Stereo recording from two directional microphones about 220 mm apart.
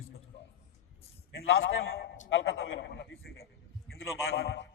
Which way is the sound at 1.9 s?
45° left (ahead or behind).